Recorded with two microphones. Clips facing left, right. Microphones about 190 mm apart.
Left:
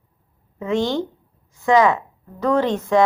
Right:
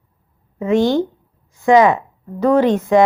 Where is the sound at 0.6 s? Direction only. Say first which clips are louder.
Right 6 dB; 10° right (ahead or behind).